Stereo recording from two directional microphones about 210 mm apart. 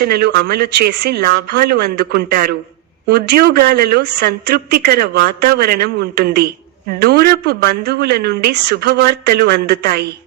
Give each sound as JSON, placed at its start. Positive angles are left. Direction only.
{"t": 0.0, "sound": "speech", "side_deg": -50}